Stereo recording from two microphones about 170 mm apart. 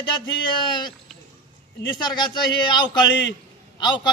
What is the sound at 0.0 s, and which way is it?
Speech, 25° left (ahead or behind).